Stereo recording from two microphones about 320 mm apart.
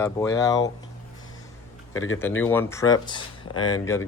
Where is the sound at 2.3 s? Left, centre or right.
Centre.